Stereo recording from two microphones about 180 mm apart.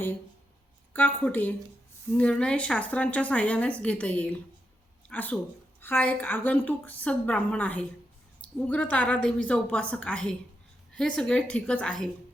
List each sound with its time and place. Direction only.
0.9 s a woman's voice: 10° left (ahead or behind)